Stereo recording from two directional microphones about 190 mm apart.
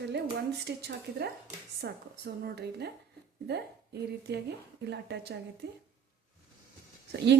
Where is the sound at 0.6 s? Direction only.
60° right (ahead or behind).